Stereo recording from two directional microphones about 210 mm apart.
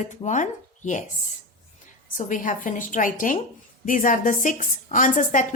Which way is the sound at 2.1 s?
40° left (ahead or behind).